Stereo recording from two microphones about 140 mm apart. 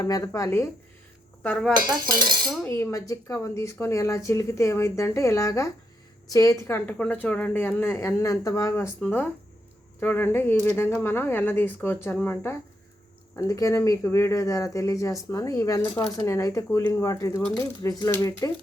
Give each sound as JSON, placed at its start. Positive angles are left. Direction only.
{"t": 0.0, "sound": "speech", "side_deg": 25}
{"t": 1.4, "sound": "speech", "side_deg": 5}
{"t": 1.7, "sound": "cutlery", "side_deg": -30}
{"t": 2.6, "sound": "a woman's voice", "side_deg": 20}